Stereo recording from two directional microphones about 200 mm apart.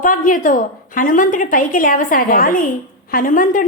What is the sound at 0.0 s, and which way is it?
A woman's voice, 45° left (ahead or behind).